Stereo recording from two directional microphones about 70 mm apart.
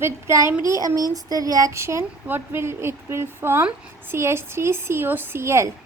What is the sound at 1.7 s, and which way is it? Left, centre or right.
Speech, right.